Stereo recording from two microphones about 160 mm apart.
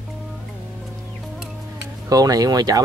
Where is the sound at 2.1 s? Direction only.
25° right (ahead or behind).